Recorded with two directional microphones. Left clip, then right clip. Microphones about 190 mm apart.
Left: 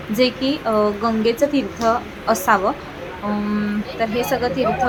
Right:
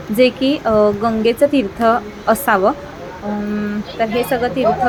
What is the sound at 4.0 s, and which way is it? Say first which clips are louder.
Speech: right 3 dB; 10° right (ahead or behind).